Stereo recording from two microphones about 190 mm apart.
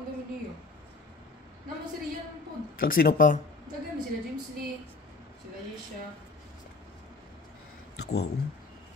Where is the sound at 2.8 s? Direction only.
50° left (ahead or behind).